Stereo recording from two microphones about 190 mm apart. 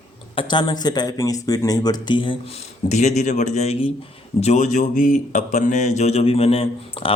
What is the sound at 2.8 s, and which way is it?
Speech, 40° left (ahead or behind).